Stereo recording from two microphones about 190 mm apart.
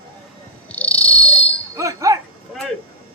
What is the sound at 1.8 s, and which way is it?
Dog, 15° right (ahead or behind).